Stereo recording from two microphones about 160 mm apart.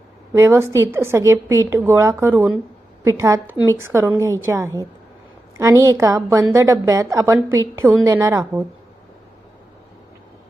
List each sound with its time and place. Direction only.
0.3 s a woman's voice: 15° right (ahead or behind)